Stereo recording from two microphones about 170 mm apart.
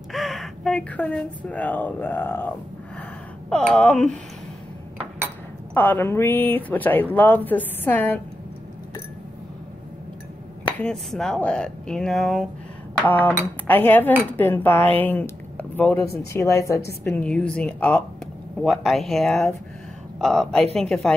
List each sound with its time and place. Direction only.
0.1 s a woman's voice: centre (ahead or behind)
5.8 s speech: 10° left (ahead or behind)
10.8 s speech: 5° left (ahead or behind)